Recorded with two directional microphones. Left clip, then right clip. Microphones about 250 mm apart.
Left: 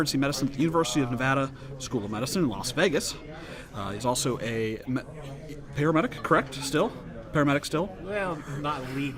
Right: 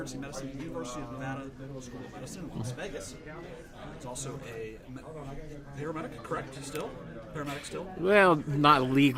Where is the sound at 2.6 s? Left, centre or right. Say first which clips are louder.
Left 13 dB; left.